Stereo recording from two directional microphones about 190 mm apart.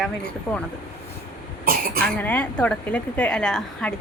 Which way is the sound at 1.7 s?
50° right (ahead or behind).